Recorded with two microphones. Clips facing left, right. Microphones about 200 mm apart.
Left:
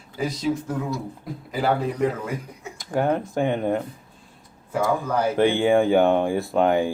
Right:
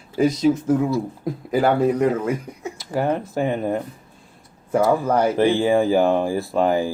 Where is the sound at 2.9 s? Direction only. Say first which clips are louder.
Even; 5° right (ahead or behind).